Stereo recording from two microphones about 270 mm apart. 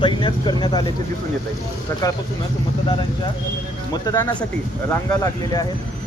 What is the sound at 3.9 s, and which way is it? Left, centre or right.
Speech, centre.